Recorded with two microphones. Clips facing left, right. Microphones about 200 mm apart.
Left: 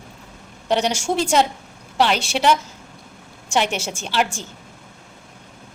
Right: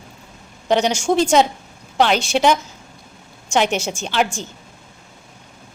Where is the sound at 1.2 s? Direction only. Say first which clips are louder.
Right 3 dB; 5° left (ahead or behind).